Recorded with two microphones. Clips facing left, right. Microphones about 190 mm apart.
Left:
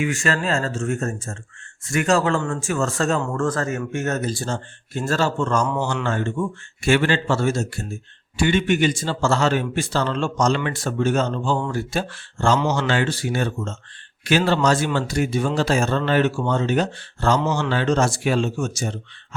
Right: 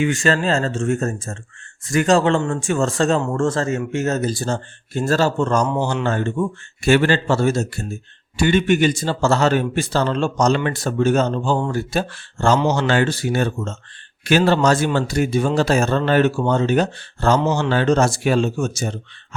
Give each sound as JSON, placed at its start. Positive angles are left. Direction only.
{"t": 0.0, "sound": "speech", "side_deg": -35}
{"t": 5.6, "sound": "speech", "side_deg": -20}
{"t": 5.9, "sound": "a man's voice", "side_deg": -35}